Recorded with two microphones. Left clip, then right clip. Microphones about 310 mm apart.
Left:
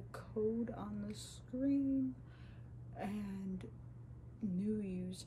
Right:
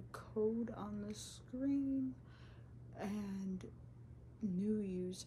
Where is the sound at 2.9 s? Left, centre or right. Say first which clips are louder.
Left 1 dB; centre.